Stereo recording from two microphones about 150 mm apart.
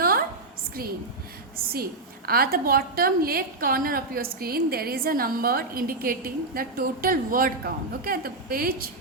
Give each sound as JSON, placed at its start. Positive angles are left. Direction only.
{"t": 0.8, "sound": "a woman's voice", "side_deg": -85}